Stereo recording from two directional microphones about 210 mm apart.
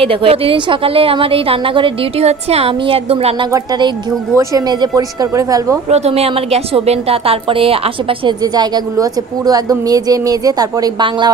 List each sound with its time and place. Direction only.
0.0 s a woman's voice: 25° right (ahead or behind)
5.9 s a woman's voice: 30° right (ahead or behind)